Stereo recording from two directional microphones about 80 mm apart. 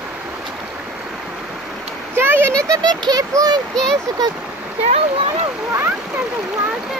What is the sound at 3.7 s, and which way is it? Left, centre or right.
Speech, centre.